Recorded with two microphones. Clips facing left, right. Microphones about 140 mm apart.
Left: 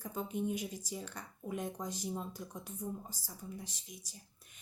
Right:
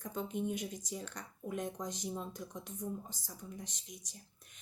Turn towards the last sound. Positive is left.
turn(degrees=5)  # may be behind; listen again after turning